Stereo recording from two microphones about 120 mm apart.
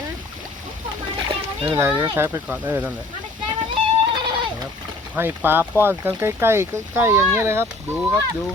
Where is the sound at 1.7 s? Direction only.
20° right (ahead or behind).